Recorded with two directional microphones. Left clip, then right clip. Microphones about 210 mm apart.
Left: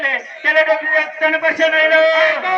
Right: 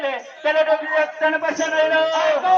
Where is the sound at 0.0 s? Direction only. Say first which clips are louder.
Left 5 dB; 45° right (ahead or behind).